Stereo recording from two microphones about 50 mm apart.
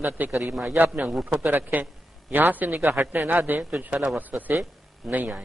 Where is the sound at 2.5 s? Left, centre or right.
Right.